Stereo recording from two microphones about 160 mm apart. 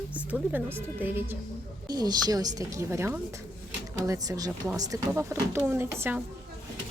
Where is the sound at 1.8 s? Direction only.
25° right (ahead or behind).